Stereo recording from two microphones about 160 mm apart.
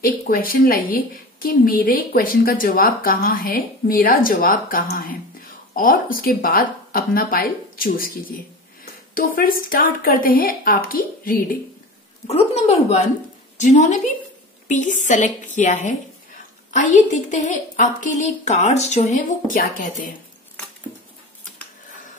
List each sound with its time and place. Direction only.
0.0 s a woman's voice: 65° left (ahead or behind)
12.3 s a woman's voice: 45° left (ahead or behind)